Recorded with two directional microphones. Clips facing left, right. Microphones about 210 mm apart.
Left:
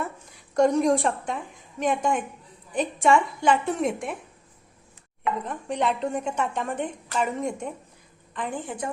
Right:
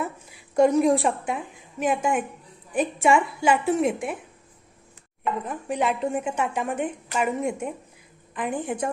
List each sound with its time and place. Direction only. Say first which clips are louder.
0.0 s a sound: right 2 dB; 5° right (ahead or behind)
1.8 s a woman's voice: right 1 dB; 5° right (ahead or behind)
5.5 s a woman's voice: right 1 dB; 5° right (ahead or behind)